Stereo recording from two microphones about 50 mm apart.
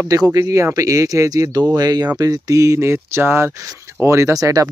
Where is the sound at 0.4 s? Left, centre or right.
Right.